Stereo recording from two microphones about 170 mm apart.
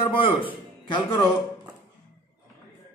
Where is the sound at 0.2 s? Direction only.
30° left (ahead or behind).